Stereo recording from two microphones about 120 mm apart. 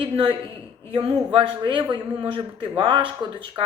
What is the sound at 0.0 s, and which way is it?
Speech, 45° right (ahead or behind).